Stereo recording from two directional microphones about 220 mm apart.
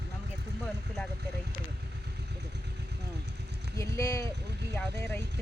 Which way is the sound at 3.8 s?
15° left (ahead or behind).